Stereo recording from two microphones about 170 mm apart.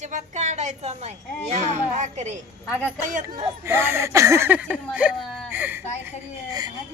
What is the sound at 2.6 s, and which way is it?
Speech, 10° left (ahead or behind).